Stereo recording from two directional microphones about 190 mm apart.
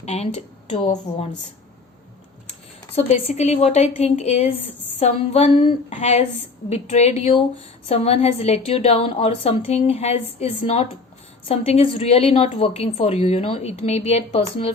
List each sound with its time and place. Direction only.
0.0 s a woman's voice: 35° left (ahead or behind)
2.9 s a woman's voice: 35° left (ahead or behind)